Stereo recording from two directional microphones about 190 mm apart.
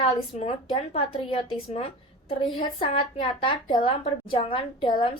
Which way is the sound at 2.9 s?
25° left (ahead or behind).